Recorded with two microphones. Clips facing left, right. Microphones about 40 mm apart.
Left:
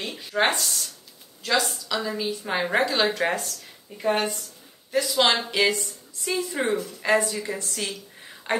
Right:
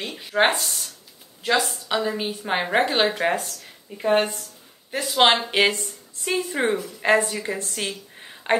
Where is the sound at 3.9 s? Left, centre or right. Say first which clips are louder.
Right 4 dB; right.